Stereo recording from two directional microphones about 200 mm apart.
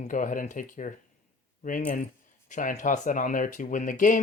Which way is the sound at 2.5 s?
40° left (ahead or behind).